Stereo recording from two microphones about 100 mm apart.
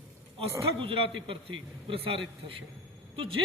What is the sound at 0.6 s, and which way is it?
A man's voice, 65° right (ahead or behind).